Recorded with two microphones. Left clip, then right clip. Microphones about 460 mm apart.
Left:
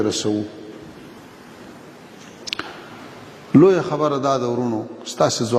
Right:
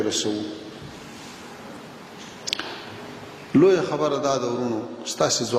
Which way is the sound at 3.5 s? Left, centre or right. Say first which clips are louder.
Left 4 dB; left.